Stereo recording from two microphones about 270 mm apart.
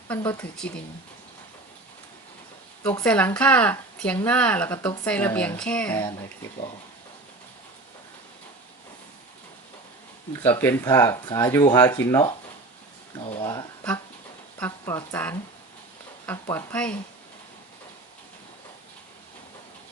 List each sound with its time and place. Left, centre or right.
0.1 s speech: centre
2.8 s speech: centre
10.4 s speech: centre